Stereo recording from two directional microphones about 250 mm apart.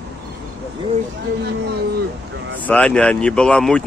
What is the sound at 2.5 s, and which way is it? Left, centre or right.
Speech, centre.